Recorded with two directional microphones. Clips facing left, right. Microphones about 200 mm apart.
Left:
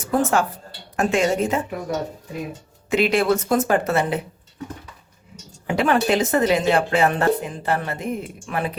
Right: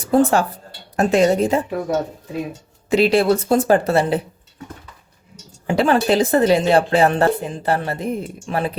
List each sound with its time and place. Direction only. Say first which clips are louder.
0.0 s speech: right 4 dB; 35° right (ahead or behind)
2.9 s speech: right 4 dB; 35° right (ahead or behind)
5.6 s speech: right 3 dB; 30° right (ahead or behind)